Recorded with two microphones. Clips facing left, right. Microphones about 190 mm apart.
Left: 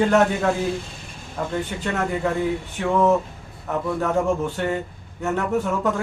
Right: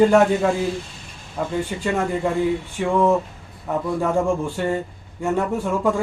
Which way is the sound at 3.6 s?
10° right (ahead or behind).